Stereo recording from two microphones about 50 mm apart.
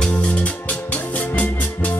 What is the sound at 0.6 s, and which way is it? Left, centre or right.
Music, left.